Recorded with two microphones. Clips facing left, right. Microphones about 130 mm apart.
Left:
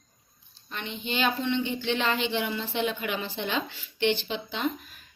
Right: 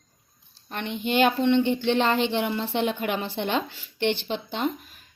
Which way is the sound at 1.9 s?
45° right (ahead or behind).